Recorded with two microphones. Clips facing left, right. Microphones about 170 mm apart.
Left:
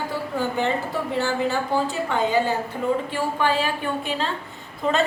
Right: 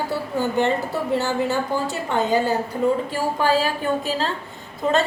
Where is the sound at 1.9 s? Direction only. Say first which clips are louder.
Right 2 dB; 40° right (ahead or behind).